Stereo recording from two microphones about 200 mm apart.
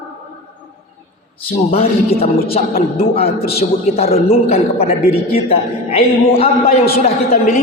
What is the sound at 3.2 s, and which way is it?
Speech, 50° left (ahead or behind).